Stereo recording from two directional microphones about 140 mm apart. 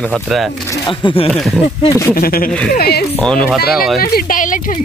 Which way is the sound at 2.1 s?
90° left.